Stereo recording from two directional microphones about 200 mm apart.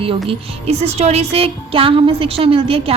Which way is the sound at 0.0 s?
25° right (ahead or behind).